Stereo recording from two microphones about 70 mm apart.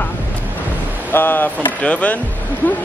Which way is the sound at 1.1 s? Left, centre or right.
Left.